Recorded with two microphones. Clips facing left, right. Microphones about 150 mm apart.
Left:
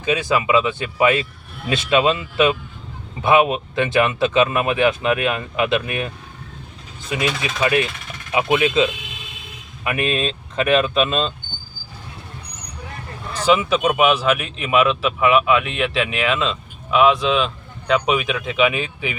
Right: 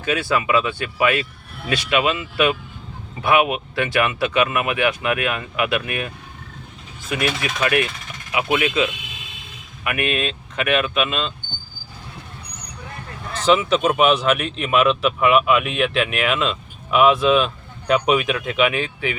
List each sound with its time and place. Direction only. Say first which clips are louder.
0.0 s speech: left 2 dB; 20° left (ahead or behind)
7.1 s speech: even; 20° left (ahead or behind)
13.3 s speech: even; 10° left (ahead or behind)